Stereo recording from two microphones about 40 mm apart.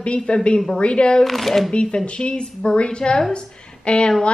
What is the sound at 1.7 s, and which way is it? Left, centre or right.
Speech, left.